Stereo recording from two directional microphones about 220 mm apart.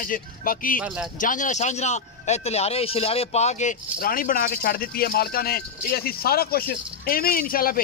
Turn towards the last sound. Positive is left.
turn(degrees=40)  # may be behind; listen again after turning